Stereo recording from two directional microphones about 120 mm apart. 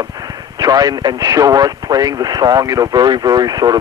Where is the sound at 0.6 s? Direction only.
30° right (ahead or behind).